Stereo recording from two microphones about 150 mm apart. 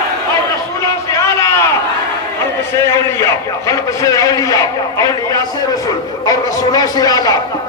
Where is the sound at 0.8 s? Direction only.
20° left (ahead or behind).